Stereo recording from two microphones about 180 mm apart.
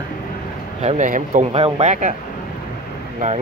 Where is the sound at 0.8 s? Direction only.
40° right (ahead or behind).